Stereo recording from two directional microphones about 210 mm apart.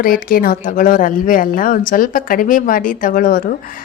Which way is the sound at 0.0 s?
45° left (ahead or behind).